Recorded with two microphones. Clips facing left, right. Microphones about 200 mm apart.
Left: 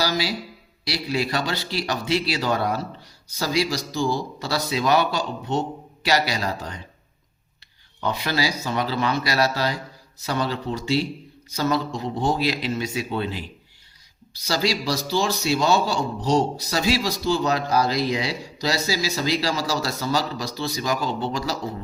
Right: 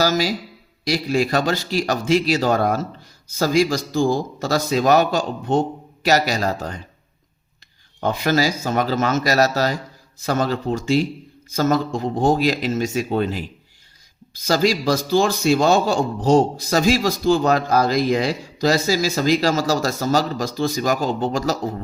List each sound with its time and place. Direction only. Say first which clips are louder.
0.0 s a man's voice: right 5 dB; 45° right (ahead or behind)
8.0 s speech: right 5 dB; 45° right (ahead or behind)